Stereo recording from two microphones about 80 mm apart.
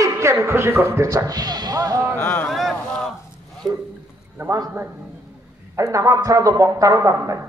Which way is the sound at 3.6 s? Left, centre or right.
Right.